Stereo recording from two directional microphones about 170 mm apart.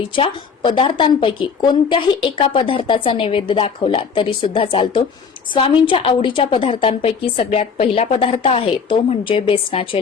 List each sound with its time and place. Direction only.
0.2 s a woman's voice: 30° left (ahead or behind)